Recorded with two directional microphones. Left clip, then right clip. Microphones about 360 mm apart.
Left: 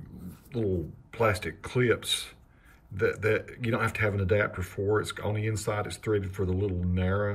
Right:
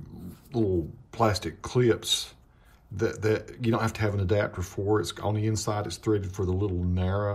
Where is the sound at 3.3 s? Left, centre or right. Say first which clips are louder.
Right 1 dB; centre.